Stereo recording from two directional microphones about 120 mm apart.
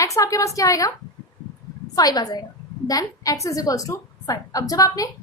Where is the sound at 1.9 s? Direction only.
30° left (ahead or behind).